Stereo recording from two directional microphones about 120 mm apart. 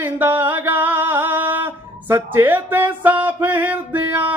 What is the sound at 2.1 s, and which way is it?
Music, 20° right (ahead or behind).